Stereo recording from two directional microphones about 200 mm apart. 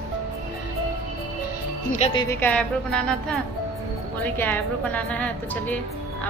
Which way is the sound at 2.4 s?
5° left (ahead or behind).